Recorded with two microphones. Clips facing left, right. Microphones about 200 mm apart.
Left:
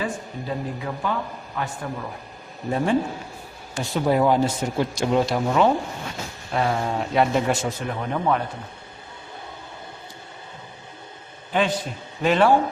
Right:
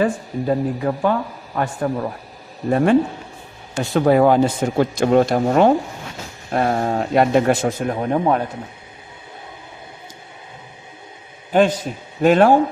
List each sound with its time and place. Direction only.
0.0 s a man's voice: 50° right (ahead or behind)
2.6 s a man's voice: 65° right (ahead or behind)
7.9 s a man's voice: 40° right (ahead or behind)
11.5 s a man's voice: 45° right (ahead or behind)